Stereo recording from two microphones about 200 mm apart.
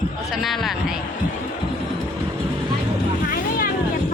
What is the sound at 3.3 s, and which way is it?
Vehicle, 45° left (ahead or behind).